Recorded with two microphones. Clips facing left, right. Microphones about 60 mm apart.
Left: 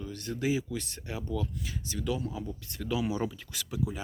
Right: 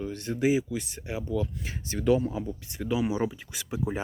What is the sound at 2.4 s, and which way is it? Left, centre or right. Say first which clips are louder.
Speech: right 4 dB; right.